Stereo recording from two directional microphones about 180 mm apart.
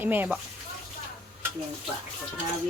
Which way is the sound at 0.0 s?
10° right (ahead or behind).